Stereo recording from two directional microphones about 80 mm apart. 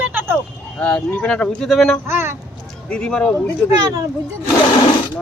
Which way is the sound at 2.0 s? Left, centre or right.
Right.